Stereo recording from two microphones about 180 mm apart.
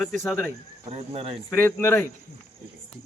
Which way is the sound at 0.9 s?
35° right (ahead or behind).